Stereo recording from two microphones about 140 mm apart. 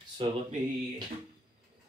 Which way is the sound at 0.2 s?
35° right (ahead or behind).